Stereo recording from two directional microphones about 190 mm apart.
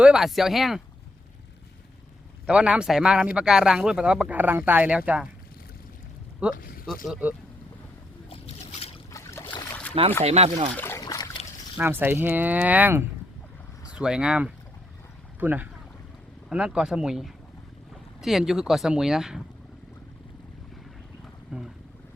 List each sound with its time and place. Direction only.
0.0 s speech: 5° right (ahead or behind)
2.5 s speech: 5° right (ahead or behind)
6.5 s speech: 50° left (ahead or behind)
6.8 s speech: centre (ahead or behind)
8.3 s boat: 30° left (ahead or behind)
9.1 s boat: 20° left (ahead or behind)
10.2 s speech: 35° right (ahead or behind)
10.8 s boat: 15° left (ahead or behind)
11.8 s speech: 10° right (ahead or behind)
21.5 s speech: 5° right (ahead or behind)